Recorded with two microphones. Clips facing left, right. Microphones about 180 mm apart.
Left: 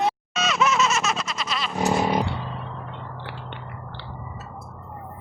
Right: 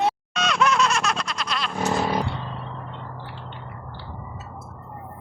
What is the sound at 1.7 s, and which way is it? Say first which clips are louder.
Vehicle: left 2 dB; 15° left (ahead or behind).